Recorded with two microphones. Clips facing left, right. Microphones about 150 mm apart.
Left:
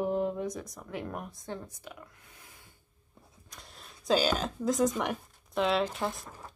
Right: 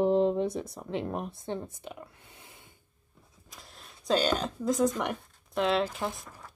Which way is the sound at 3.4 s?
Centre (ahead or behind).